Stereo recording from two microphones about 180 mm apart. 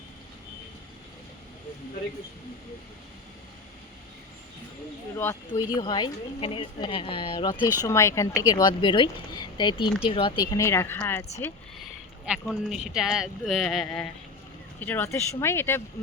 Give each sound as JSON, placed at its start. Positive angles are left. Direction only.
{"t": 5.1, "sound": "speech", "side_deg": 15}
{"t": 7.8, "sound": "speech", "side_deg": 15}
{"t": 11.8, "sound": "speech", "side_deg": -5}